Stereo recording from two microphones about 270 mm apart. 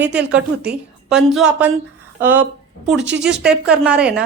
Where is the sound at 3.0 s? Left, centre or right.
Right.